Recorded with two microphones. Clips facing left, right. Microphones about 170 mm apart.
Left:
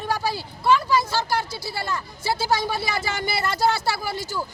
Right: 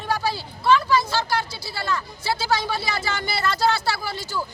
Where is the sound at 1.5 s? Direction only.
45° left (ahead or behind).